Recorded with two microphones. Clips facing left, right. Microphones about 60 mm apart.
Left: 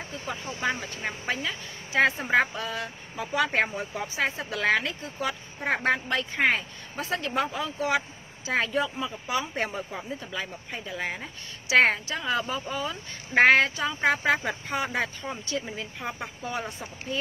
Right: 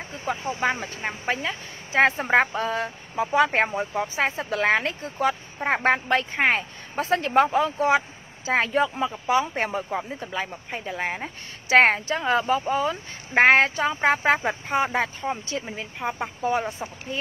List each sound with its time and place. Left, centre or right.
0.1 s a woman's voice: right